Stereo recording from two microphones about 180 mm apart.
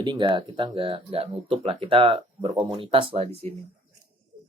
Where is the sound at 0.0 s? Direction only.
25° right (ahead or behind).